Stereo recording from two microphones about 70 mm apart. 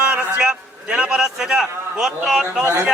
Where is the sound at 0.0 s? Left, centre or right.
Centre.